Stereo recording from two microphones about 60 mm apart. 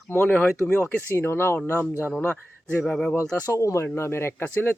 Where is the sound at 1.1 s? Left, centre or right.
Left.